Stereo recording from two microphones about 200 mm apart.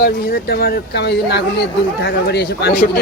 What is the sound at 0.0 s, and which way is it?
Speech, 50° left (ahead or behind).